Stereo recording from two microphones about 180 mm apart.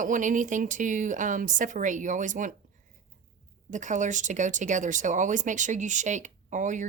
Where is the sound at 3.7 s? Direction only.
45° right (ahead or behind).